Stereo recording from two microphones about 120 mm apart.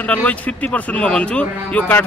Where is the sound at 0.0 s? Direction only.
10° left (ahead or behind).